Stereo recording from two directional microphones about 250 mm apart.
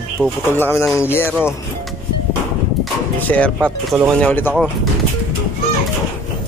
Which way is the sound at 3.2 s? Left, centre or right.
Centre.